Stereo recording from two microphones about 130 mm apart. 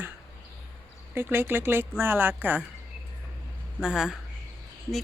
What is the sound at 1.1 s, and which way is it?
Speech, 15° right (ahead or behind).